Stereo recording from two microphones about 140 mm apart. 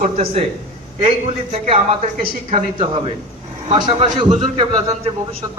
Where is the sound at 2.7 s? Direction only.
40° right (ahead or behind).